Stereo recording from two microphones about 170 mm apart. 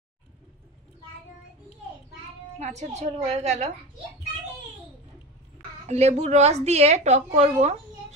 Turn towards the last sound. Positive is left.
turn(degrees=-40)  # may be behind; listen again after turning